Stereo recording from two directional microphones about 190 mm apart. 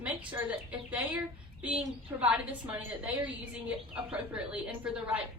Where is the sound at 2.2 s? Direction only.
10° right (ahead or behind).